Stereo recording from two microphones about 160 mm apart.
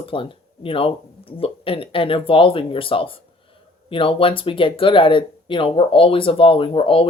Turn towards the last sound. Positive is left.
turn(degrees=35)  # may be behind; listen again after turning